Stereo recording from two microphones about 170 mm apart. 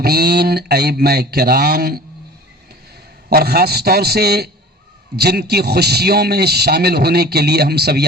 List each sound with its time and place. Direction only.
0.0 s a man's voice: 70° right (ahead or behind)
3.2 s a man's voice: 65° right (ahead or behind)